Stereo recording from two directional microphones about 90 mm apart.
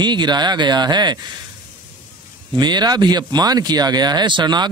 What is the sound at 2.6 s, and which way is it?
A man's voice, 50° right (ahead or behind).